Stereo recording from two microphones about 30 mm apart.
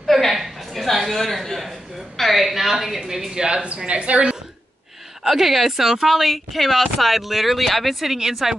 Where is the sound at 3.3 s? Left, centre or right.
Right.